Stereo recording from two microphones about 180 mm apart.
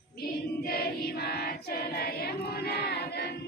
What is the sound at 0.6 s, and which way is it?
Choir, 60° left (ahead or behind).